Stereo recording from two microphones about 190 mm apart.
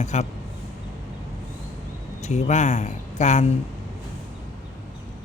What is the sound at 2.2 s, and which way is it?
A man's voice, 40° left (ahead or behind).